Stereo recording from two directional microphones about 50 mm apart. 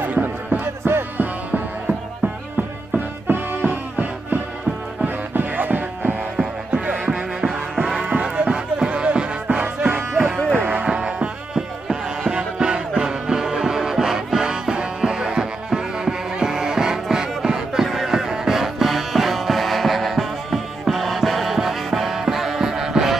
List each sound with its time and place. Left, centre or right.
0.0 s music: right
0.8 s music: right
3.3 s music: right
6.3 s music: centre
10.5 s music: right
10.8 s music: centre